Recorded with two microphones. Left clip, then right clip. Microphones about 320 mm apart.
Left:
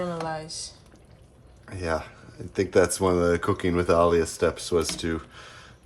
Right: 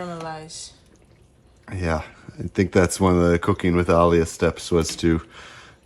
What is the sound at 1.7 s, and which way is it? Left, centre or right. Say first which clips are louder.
Speech: right 2 dB; centre.